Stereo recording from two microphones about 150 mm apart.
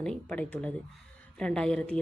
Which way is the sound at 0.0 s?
5° left (ahead or behind).